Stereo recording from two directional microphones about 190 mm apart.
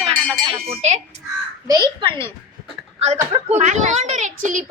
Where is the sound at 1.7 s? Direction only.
25° right (ahead or behind).